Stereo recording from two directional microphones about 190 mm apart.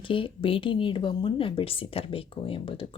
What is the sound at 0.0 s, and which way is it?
A woman's voice, 25° left (ahead or behind).